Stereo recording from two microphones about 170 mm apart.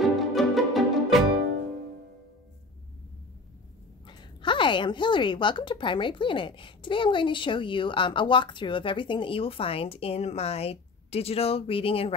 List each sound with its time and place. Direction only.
0.0 s music: centre (ahead or behind)
4.1 s a woman's voice: 25° left (ahead or behind)